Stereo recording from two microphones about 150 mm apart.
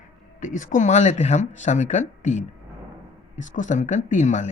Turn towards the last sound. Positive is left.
turn(degrees=55)  # may be behind; listen again after turning